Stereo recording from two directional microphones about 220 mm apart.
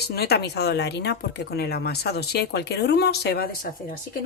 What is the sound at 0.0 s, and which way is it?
Speech, 45° left (ahead or behind).